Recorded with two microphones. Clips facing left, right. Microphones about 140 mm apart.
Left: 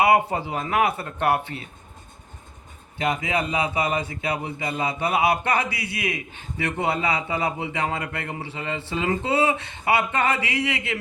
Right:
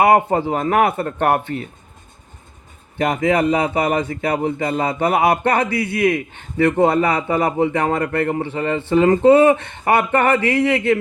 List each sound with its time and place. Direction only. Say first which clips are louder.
0.0 s speech: right 5 dB; 55° right (ahead or behind)
3.0 s speech: right 8 dB; 55° right (ahead or behind)